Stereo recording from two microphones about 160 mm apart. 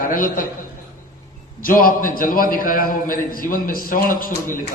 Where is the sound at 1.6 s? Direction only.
60° left (ahead or behind).